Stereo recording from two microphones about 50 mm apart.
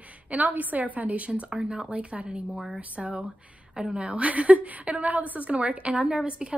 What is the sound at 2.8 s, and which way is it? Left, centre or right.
A woman's voice, right.